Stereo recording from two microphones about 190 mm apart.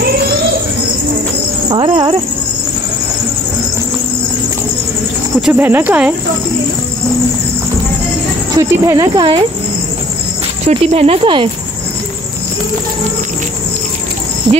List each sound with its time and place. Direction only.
1.7 s cricket: 20° right (ahead or behind)
5.4 s speech: 10° right (ahead or behind)
8.5 s speech: 20° right (ahead or behind)
10.6 s speech: 35° right (ahead or behind)